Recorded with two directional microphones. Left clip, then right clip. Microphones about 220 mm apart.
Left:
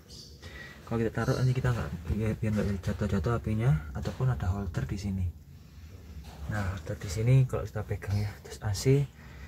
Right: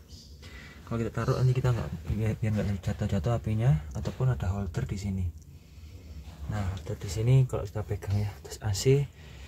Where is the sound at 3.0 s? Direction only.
15° right (ahead or behind).